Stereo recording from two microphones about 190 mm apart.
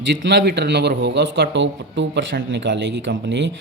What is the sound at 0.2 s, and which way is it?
Speech, 65° right (ahead or behind).